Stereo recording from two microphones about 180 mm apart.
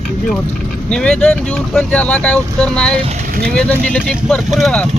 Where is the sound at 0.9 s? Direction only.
5° left (ahead or behind).